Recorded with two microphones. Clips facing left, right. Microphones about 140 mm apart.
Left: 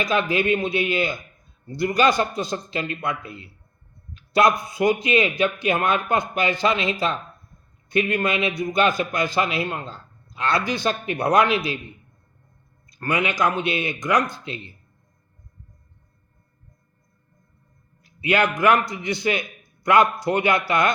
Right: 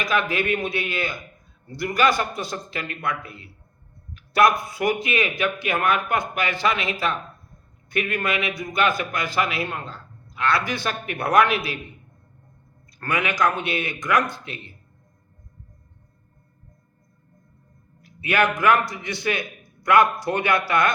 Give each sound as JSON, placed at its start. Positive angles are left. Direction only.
{"t": 0.0, "sound": "a man's voice", "side_deg": 20}
{"t": 13.0, "sound": "a man's voice", "side_deg": 20}
{"t": 18.0, "sound": "a man's voice", "side_deg": 20}